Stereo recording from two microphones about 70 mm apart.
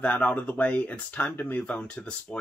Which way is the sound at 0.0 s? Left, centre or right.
Centre.